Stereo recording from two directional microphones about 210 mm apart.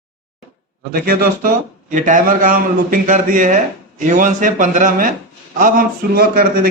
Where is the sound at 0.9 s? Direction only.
45° right (ahead or behind).